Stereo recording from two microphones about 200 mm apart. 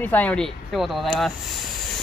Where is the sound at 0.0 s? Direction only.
10° left (ahead or behind).